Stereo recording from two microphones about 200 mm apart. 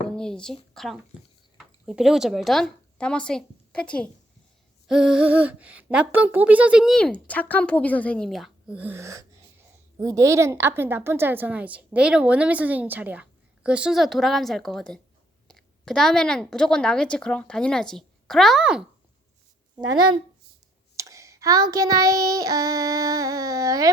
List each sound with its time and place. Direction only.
0.2 s a woman's voice: 5° left (ahead or behind)
20.9 s child singing: 15° right (ahead or behind)